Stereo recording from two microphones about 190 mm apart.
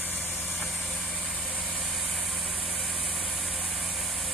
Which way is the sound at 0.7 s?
5° right (ahead or behind).